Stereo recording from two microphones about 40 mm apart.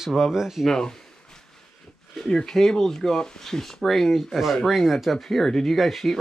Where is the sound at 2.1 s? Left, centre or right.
Centre.